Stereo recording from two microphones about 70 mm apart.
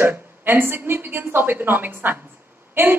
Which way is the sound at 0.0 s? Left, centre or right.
Right.